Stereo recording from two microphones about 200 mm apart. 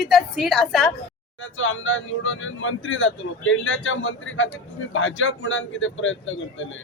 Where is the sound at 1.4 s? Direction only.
75° left (ahead or behind).